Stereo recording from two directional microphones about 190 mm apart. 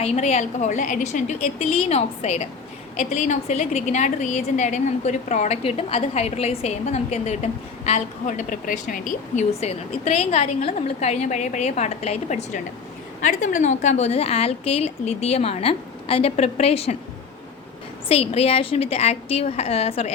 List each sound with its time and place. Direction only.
0.0 s speech: 35° left (ahead or behind)
18.1 s speech: 30° left (ahead or behind)